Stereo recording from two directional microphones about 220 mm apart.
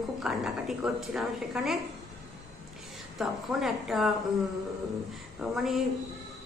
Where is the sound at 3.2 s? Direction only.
Centre (ahead or behind).